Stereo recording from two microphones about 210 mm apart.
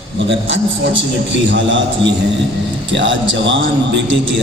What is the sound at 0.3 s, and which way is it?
A man's voice, 60° right (ahead or behind).